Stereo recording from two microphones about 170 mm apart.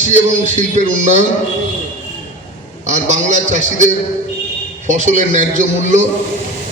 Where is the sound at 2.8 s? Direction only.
45° right (ahead or behind).